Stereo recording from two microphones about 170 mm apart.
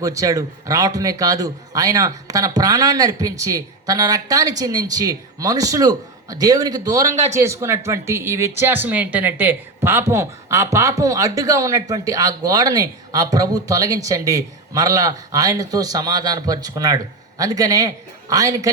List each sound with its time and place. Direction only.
0.0 s speech: 20° right (ahead or behind)
7.1 s speech: 40° right (ahead or behind)
7.3 s speech: 15° right (ahead or behind)